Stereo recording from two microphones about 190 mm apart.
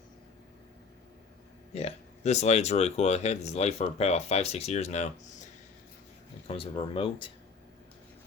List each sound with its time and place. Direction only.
1.7 s speech: 35° left (ahead or behind)
6.5 s speech: 30° left (ahead or behind)